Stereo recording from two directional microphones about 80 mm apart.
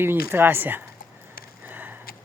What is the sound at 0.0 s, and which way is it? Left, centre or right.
Speech, right.